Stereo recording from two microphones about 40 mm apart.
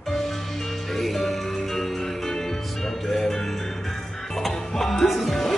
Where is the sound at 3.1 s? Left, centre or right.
Centre.